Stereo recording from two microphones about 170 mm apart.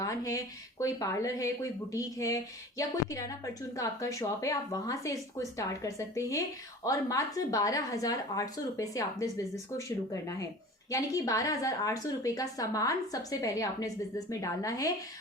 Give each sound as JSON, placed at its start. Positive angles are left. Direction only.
{"t": 0.0, "sound": "a woman's voice", "side_deg": 20}